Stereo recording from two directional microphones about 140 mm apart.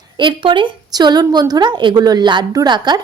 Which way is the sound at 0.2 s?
35° right (ahead or behind).